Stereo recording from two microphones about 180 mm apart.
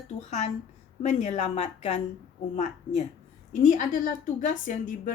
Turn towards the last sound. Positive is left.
turn(degrees=50)  # may be behind; listen again after turning